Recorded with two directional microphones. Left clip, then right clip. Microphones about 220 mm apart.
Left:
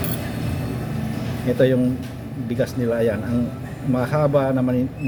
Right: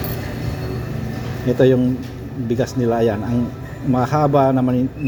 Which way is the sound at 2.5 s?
10° right (ahead or behind).